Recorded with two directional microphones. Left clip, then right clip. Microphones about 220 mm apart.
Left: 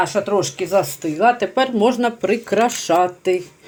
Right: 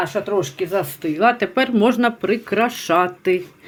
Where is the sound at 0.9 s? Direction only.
10° right (ahead or behind).